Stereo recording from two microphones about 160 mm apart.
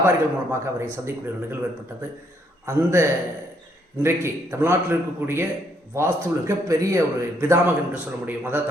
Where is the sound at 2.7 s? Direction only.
15° right (ahead or behind).